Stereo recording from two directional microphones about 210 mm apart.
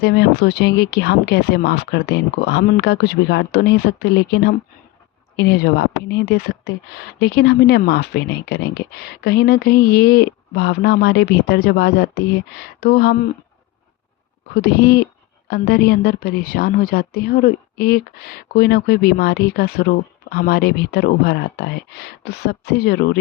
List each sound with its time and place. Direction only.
0.0 s speech: 55° left (ahead or behind)
14.5 s speech: 50° left (ahead or behind)